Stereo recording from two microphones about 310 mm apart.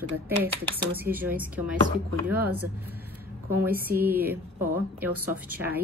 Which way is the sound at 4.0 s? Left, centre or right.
Centre.